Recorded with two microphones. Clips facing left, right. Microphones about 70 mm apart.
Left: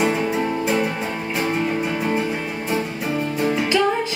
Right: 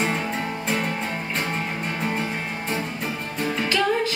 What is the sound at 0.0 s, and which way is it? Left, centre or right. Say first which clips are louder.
Music: left 5 dB; centre.